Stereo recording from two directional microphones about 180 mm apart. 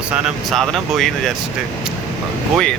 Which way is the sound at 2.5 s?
5° left (ahead or behind).